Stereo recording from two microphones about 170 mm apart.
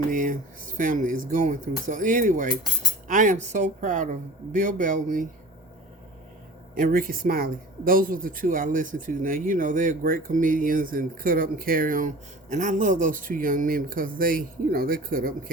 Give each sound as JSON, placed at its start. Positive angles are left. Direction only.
{"t": 0.1, "sound": "speech", "side_deg": -50}
{"t": 6.7, "sound": "speech", "side_deg": -55}